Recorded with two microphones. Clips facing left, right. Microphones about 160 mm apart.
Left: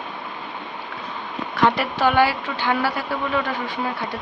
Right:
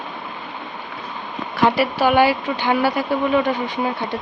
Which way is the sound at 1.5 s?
5° right (ahead or behind).